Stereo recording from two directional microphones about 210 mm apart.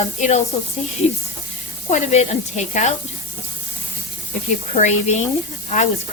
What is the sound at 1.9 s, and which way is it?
Speech, 30° left (ahead or behind).